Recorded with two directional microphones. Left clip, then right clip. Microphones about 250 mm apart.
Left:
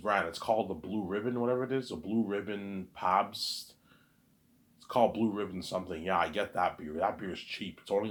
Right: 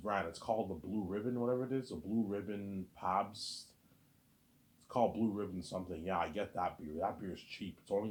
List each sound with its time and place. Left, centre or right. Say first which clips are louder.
0.0 s speech: left 7 dB; centre
4.9 s speech: left 6 dB; centre